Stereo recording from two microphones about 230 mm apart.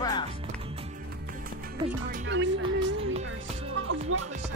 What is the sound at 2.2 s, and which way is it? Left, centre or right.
Speech, right.